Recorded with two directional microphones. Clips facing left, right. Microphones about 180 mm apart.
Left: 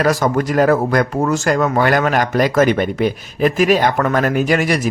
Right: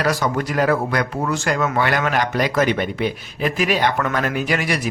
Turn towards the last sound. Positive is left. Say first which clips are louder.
# left 6 dB
turn(degrees=45)  # may be behind; listen again after turning